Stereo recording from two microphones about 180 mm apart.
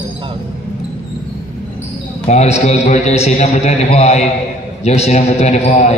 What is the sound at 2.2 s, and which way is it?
A man's voice, 40° left (ahead or behind).